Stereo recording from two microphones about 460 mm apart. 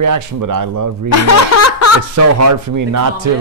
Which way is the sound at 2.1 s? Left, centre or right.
Right.